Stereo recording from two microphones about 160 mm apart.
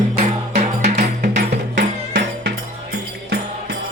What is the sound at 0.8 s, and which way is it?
Music, 80° right.